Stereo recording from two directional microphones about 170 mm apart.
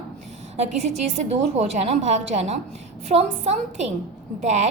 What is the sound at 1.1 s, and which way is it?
A woman's voice, 40° right (ahead or behind).